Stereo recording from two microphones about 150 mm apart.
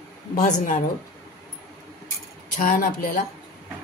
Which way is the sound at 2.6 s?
70° left (ahead or behind).